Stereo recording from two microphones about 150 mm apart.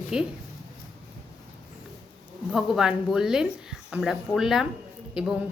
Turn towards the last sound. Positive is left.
turn(degrees=-5)  # may be behind; listen again after turning